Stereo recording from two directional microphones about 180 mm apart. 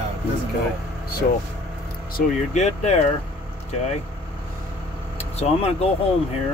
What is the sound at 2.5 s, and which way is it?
Speech, 40° left (ahead or behind).